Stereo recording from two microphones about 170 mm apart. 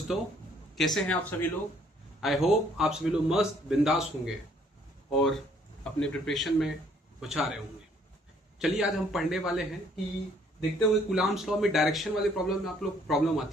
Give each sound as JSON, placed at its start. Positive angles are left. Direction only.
{"t": 0.1, "sound": "speech", "side_deg": -5}
{"t": 2.2, "sound": "speech", "side_deg": 0}
{"t": 5.8, "sound": "speech", "side_deg": 5}